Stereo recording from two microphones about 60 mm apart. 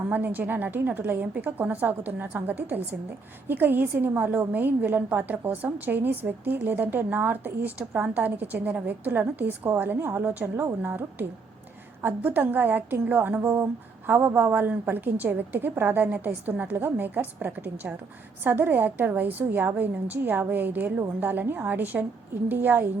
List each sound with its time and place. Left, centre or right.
0.1 s a woman's voice: right